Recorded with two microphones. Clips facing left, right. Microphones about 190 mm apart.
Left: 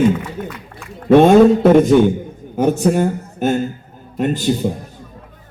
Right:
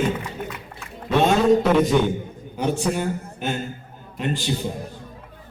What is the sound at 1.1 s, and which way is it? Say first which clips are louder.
A man's voice: left 9 dB; 50° left (ahead or behind).